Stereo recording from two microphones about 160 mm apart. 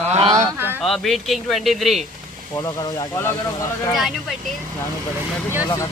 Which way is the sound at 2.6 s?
20° left (ahead or behind).